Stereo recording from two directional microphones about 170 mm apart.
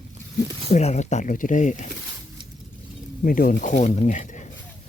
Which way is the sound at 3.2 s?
60° left (ahead or behind).